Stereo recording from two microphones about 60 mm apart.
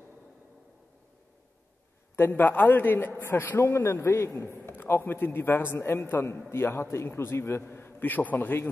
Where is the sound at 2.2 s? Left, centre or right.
Left.